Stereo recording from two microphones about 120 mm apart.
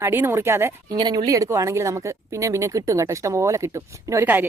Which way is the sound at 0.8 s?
35° right (ahead or behind).